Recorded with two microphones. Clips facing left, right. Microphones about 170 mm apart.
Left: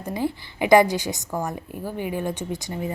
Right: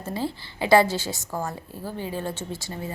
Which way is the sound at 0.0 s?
15° left (ahead or behind).